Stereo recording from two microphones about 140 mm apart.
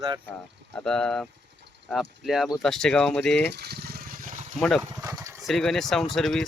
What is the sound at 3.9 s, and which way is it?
Vehicle, 90° right.